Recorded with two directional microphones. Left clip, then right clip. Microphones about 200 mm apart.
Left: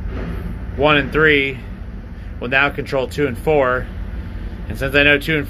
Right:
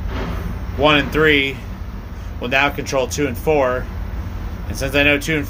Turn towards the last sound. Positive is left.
turn(degrees=-10)  # may be behind; listen again after turning